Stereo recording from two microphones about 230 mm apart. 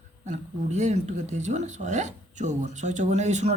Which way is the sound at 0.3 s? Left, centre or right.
Right.